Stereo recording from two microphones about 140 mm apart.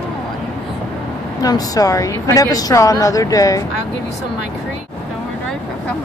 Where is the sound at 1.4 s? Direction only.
25° left (ahead or behind).